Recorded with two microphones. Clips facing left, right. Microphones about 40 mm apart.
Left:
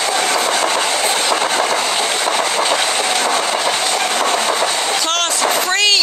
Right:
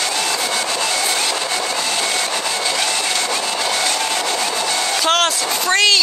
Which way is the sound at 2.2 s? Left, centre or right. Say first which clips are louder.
Left 5 dB; left.